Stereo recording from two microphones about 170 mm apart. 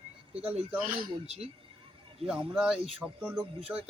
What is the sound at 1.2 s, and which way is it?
Speech, 35° right (ahead or behind).